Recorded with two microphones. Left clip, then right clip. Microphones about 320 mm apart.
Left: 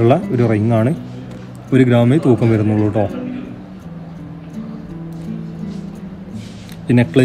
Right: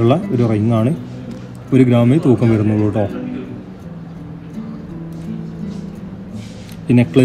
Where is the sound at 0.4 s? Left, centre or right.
Centre.